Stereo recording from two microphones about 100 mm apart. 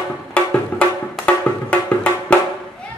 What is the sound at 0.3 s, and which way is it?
Music, 10° left (ahead or behind).